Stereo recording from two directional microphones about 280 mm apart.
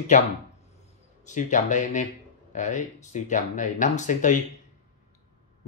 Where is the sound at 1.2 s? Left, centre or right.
Left.